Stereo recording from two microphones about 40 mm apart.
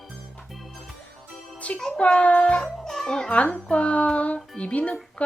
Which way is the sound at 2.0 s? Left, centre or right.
Left.